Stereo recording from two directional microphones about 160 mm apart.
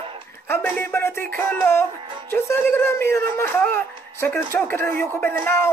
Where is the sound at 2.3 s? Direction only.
15° left (ahead or behind).